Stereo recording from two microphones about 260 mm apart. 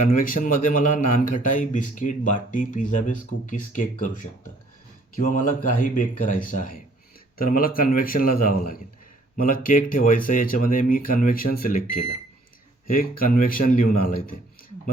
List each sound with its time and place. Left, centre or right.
0.1 s speech: left
12.9 s speech: left